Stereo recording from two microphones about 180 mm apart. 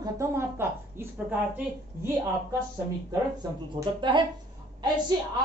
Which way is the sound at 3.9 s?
25° right (ahead or behind).